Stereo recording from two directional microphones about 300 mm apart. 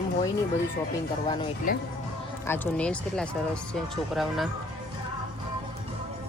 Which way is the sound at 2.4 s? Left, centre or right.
Centre.